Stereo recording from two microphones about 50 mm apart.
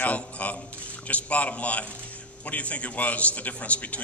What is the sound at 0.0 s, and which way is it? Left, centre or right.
Squish, left.